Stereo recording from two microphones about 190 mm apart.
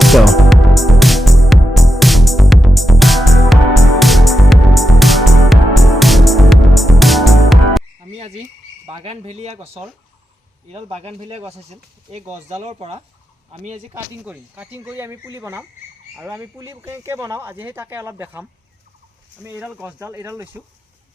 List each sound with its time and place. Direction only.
0.0 s music: centre (ahead or behind)
8.1 s cricket: 35° right (ahead or behind)
8.9 s a sound: 30° right (ahead or behind)
10.7 s speech: 30° right (ahead or behind)
13.9 s speech: 10° right (ahead or behind)
19.5 s speech: 10° right (ahead or behind)